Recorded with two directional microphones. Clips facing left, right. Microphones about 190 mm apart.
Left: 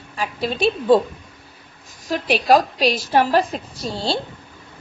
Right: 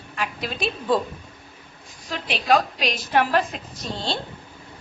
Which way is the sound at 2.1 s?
45° left (ahead or behind).